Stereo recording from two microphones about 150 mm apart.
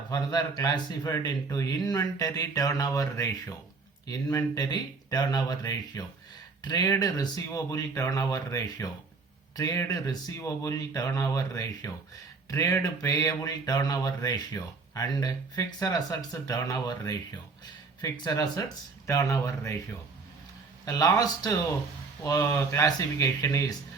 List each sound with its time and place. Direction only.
0.1 s speech: 25° left (ahead or behind)
20.8 s speech: 25° left (ahead or behind)